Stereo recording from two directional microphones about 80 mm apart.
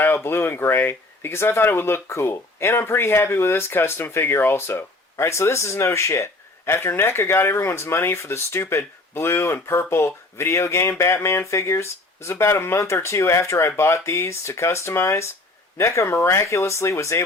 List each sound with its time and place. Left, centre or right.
0.0 s speech: left